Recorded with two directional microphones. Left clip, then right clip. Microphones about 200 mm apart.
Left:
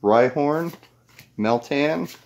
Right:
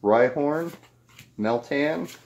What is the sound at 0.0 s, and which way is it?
Speech, 40° left (ahead or behind).